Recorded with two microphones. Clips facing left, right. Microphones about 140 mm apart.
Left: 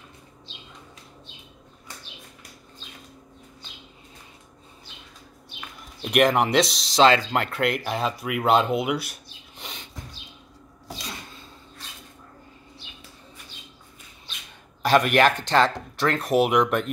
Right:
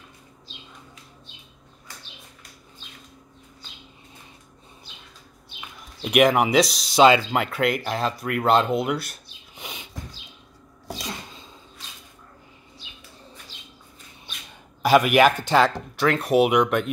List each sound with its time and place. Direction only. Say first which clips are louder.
6.0 s speech: right 2 dB; 5° right (ahead or behind)
13.5 s bird: left 1 dB; 90° right
14.8 s speech: right 2 dB; 5° right (ahead or behind)